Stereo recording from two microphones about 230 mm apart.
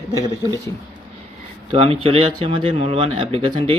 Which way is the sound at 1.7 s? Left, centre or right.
Right.